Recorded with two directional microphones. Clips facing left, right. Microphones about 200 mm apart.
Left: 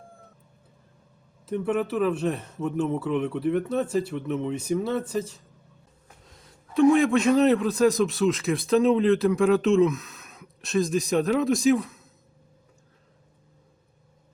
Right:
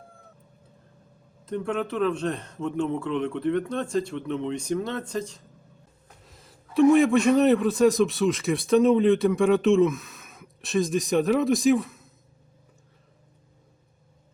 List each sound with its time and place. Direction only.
1.5 s a man's voice: 5° left (ahead or behind)